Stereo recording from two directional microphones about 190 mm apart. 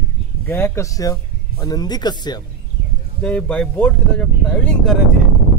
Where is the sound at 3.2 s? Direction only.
5° left (ahead or behind).